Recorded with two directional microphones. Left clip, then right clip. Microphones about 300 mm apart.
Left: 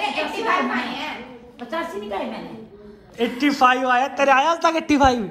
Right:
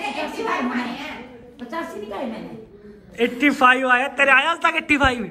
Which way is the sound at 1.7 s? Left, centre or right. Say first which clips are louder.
Left 3 dB; centre.